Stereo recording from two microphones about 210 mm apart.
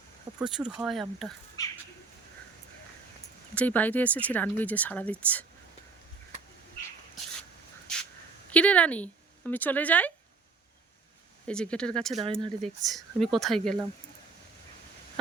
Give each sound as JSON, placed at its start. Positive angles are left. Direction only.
{"t": 0.3, "sound": "speech", "side_deg": -5}
{"t": 1.6, "sound": "bird", "side_deg": 15}
{"t": 3.5, "sound": "speech", "side_deg": 5}
{"t": 7.9, "sound": "a sound", "side_deg": 5}
{"t": 8.4, "sound": "speech", "side_deg": 5}
{"t": 11.4, "sound": "speech", "side_deg": 5}
{"t": 12.2, "sound": "speech", "side_deg": -25}
{"t": 12.6, "sound": "speech", "side_deg": 0}